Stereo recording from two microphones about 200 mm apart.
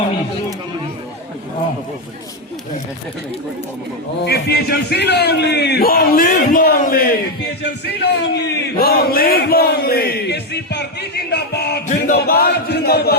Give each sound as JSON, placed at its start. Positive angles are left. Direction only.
{"t": 4.3, "sound": "a man's voice", "side_deg": 55}
{"t": 11.9, "sound": "music", "side_deg": 45}